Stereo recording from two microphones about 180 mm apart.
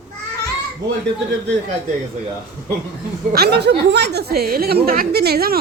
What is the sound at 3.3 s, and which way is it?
Speech, 65° right (ahead or behind).